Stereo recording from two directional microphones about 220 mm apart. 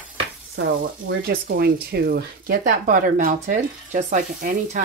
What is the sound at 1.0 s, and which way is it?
Speech, 50° right (ahead or behind).